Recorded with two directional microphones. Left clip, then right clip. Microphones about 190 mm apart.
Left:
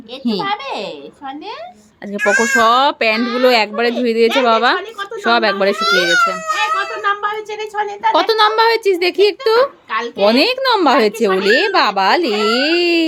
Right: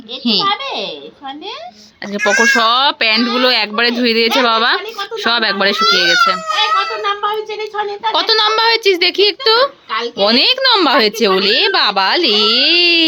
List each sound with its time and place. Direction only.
0.3 s a child's voice: 10° left (ahead or behind)
2.1 s a child's voice: 25° right (ahead or behind)
2.4 s speech: 5° left (ahead or behind)
5.7 s a child's voice: 30° right (ahead or behind)
6.5 s a sound: 30° right (ahead or behind)
7.6 s a child's voice: 15° left (ahead or behind)
8.1 s speech: 5° left (ahead or behind)